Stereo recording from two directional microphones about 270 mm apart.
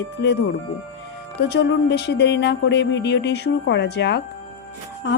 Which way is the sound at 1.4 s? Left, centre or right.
Left.